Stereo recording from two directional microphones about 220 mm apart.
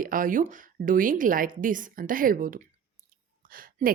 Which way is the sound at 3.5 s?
40° right (ahead or behind).